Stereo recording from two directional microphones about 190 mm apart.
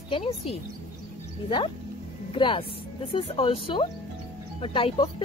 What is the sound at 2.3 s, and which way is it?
Speech, 25° left (ahead or behind).